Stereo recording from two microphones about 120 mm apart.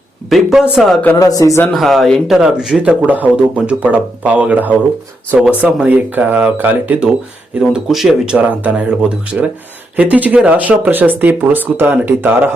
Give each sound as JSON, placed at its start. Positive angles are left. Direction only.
{"t": 0.3, "sound": "speech", "side_deg": 0}
{"t": 1.1, "sound": "speech", "side_deg": 30}
{"t": 1.6, "sound": "speech", "side_deg": 0}
{"t": 7.6, "sound": "speech", "side_deg": -5}